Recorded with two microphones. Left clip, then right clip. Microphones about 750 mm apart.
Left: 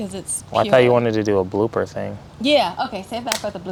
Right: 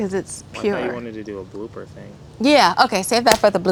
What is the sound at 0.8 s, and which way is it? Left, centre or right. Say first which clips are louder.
Speech: left 11 dB; left.